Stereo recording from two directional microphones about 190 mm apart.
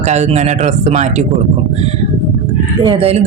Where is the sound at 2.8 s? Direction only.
30° right (ahead or behind).